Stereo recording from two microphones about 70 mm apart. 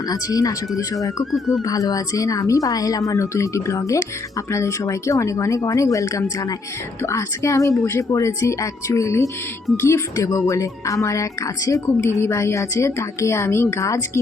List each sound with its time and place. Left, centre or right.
0.1 s a woman's voice: left
3.1 s speech: left
11.9 s speech: left